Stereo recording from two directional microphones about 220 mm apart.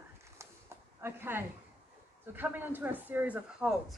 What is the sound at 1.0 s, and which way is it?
A woman's voice, 10° right (ahead or behind).